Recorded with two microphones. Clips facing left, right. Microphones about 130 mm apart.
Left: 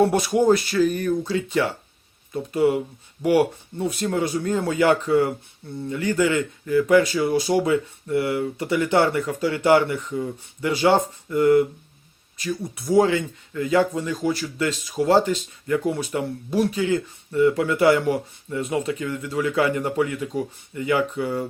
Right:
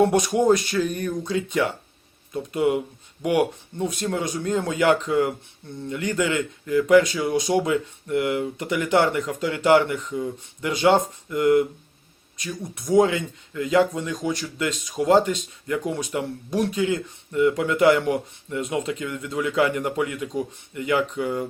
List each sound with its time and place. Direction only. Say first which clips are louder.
0.0 s speech: even; 5° left (ahead or behind)
8.6 s speech: left 1 dB; 15° right (ahead or behind)
10.2 s speech: left 1 dB; centre (ahead or behind)